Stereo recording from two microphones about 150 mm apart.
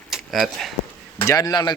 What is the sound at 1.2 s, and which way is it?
Speech, 20° left (ahead or behind).